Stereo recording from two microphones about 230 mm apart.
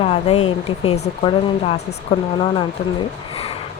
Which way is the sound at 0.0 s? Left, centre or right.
Left.